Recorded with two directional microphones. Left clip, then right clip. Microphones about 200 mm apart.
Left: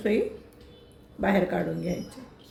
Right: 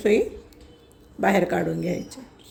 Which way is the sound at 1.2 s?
50° right (ahead or behind).